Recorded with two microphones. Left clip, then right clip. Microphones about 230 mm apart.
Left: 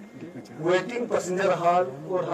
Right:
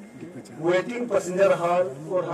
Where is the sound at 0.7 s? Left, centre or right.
Left.